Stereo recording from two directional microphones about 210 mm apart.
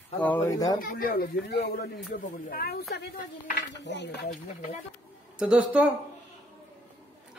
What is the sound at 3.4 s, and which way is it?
Speech, 55° left (ahead or behind).